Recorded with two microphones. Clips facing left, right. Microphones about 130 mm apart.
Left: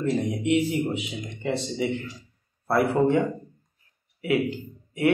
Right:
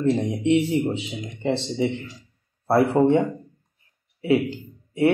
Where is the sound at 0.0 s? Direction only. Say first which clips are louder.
Right 3 dB; 30° right (ahead or behind).